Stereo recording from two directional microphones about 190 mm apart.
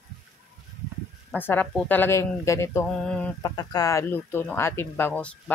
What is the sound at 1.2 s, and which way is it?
Speech, 10° left (ahead or behind).